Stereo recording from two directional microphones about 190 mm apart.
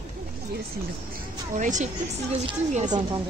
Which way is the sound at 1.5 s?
40° right (ahead or behind).